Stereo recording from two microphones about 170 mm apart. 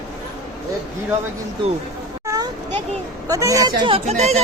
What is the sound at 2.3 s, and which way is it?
Children playing, 20° right (ahead or behind).